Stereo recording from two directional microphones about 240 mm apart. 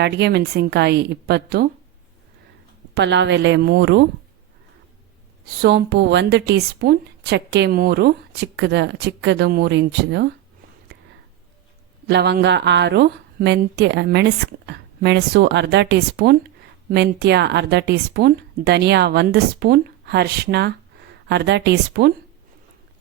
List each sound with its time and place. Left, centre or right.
0.0 s speech: right
2.9 s speech: right
5.6 s speech: right
12.0 s speech: right